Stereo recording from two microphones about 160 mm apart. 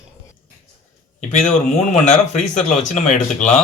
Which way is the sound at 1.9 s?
45° left (ahead or behind).